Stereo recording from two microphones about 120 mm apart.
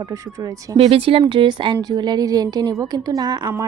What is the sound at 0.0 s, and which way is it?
Speech, 30° right (ahead or behind).